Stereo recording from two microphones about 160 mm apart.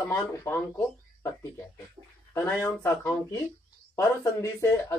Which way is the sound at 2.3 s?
15° left (ahead or behind).